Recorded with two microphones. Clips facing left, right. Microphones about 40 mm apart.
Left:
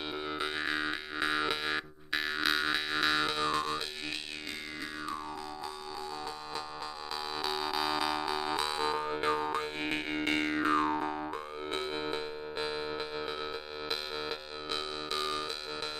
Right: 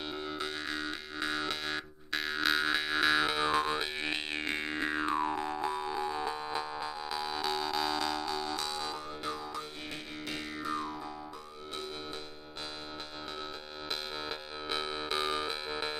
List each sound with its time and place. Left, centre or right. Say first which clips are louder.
0.4 s music: left 6 dB; centre
4.5 s music: right 9 dB; right
5.9 s music: right 5 dB; right
7.4 s music: left 1 dB; centre; by 9.9 s left
10.1 s music: left 9 dB; left
14.7 s civil defense siren: right 2 dB; centre